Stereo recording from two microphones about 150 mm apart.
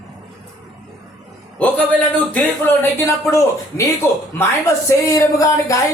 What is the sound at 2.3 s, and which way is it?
Speech, 10° left (ahead or behind).